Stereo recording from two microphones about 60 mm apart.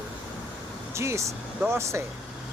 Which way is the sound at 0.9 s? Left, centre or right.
Right.